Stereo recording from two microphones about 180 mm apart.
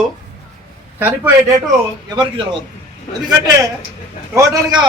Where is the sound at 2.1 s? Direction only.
25° right (ahead or behind).